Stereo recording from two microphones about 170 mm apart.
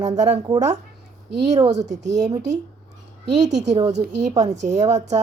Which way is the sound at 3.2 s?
90° right.